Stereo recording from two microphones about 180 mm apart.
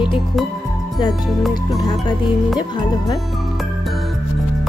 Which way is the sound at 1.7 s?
20° left (ahead or behind).